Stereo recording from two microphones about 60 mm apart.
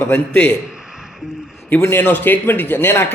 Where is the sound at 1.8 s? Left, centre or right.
Left.